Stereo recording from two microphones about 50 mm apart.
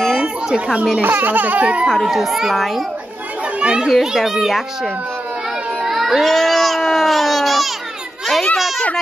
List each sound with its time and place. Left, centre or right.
1.0 s speech: right
1.6 s speech: right
1.9 s a child's voice: centre
3.6 s a child's voice: centre
3.9 s a child's voice: centre
5.9 s speech: centre
8.5 s a sound: centre